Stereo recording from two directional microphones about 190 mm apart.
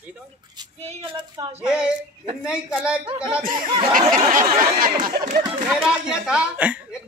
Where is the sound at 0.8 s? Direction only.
30° right (ahead or behind).